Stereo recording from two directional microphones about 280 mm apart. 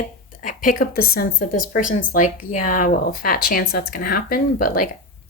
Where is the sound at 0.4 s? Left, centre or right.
Left.